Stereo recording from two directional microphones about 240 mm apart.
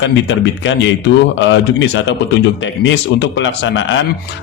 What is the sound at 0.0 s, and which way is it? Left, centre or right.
A man's voice, left.